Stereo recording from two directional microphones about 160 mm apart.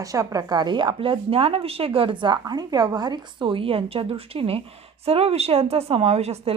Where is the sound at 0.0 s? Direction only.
20° right (ahead or behind).